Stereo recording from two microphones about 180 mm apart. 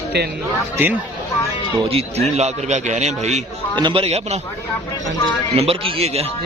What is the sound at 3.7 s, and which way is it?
Speech, 30° right (ahead or behind).